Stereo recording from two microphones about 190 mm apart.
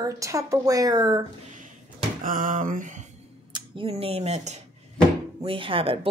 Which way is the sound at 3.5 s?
25° right (ahead or behind).